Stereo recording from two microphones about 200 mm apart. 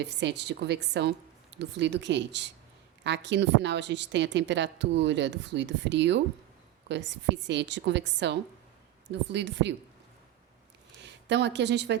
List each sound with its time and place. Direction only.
0.0 s a woman's voice: 60° right (ahead or behind)
11.0 s speech: 60° right (ahead or behind)